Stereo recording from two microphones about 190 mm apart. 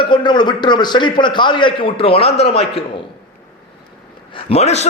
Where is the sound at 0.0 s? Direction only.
25° left (ahead or behind).